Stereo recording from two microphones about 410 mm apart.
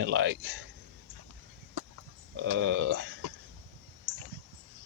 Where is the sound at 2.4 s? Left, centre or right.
Right.